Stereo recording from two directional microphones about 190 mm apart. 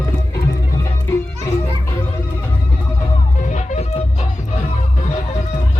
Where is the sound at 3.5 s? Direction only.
40° left (ahead or behind).